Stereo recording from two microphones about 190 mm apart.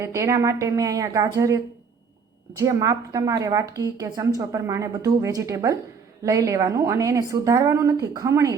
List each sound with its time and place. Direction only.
0.0 s a woman's voice: 15° right (ahead or behind)